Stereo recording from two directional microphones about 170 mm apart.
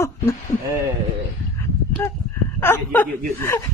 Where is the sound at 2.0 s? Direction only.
15° left (ahead or behind).